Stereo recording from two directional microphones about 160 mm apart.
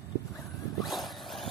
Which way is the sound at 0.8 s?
Centre (ahead or behind).